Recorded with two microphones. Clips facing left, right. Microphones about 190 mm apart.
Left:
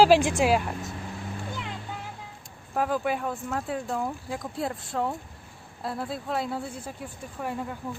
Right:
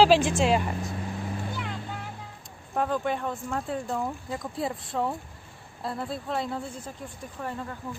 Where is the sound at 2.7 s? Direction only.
5° left (ahead or behind).